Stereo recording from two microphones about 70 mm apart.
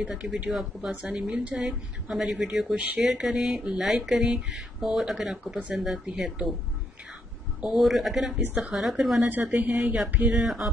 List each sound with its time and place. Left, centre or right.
0.1 s speech: centre
7.8 s speech: centre
9.3 s speech: right; by 10.7 s centre